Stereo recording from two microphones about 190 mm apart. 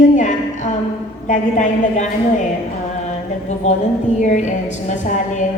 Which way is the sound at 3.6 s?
40° left (ahead or behind).